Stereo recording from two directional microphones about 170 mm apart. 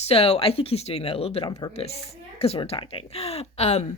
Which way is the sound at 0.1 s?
35° left (ahead or behind).